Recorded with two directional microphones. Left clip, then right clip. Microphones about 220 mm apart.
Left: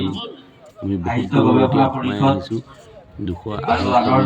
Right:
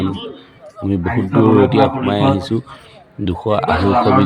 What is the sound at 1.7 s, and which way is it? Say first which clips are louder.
Speech: right 4 dB; 30° right (ahead or behind).